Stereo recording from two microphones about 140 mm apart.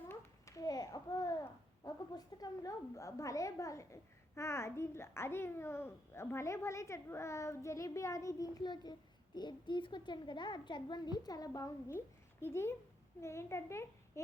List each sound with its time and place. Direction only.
0.1 s babbling: 25° left (ahead or behind)
1.8 s a child's voice: 25° left (ahead or behind)